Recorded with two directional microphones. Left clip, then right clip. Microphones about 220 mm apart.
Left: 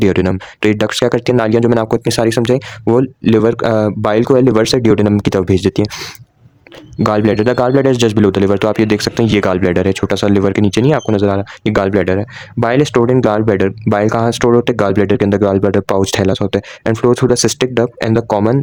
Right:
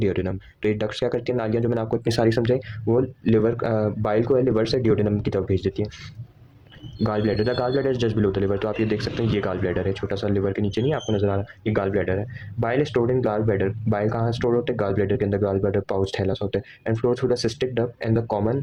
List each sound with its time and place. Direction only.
0.0 s speech: 50° left (ahead or behind)
2.0 s speech: 35° left (ahead or behind)